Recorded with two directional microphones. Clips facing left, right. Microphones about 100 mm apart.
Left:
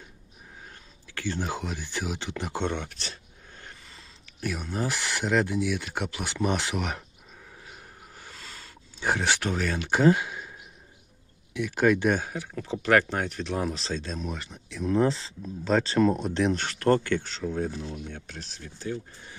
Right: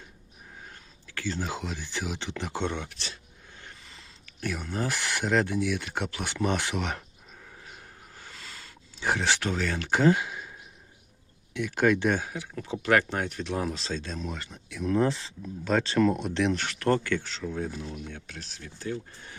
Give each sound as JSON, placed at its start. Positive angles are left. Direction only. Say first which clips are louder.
{"t": 1.1, "sound": "speech", "louder": "left 1 dB", "side_deg": 25}
{"t": 3.6, "sound": "a sound", "louder": "left 1 dB", "side_deg": 35}
{"t": 4.9, "sound": "speech", "louder": "even", "side_deg": 0}
{"t": 5.5, "sound": "speech", "louder": "even", "side_deg": 20}
{"t": 8.3, "sound": "wheeze", "louder": "even", "side_deg": 35}
{"t": 9.0, "sound": "speech", "louder": "left 1 dB", "side_deg": 20}
{"t": 11.9, "sound": "speech", "louder": "left 2 dB", "side_deg": 20}
{"t": 12.2, "sound": "speech", "louder": "left 2 dB", "side_deg": 35}
{"t": 15.0, "sound": "speech", "louder": "left 2 dB", "side_deg": 30}
{"t": 17.0, "sound": "speech", "louder": "left 2 dB", "side_deg": 25}
{"t": 17.2, "sound": "speech", "louder": "left 3 dB", "side_deg": 35}